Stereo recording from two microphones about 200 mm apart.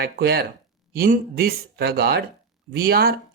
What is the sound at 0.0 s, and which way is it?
A woman's voice, 50° right (ahead or behind).